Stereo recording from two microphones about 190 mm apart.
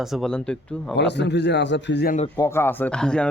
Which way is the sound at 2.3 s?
15° left (ahead or behind).